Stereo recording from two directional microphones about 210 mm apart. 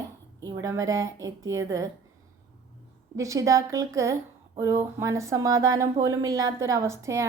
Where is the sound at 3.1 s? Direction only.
15° right (ahead or behind).